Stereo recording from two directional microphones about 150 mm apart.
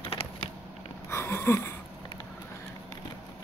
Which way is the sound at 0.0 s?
40° left (ahead or behind).